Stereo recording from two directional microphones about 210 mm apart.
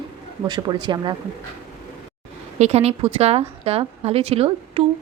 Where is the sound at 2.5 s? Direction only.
30° right (ahead or behind).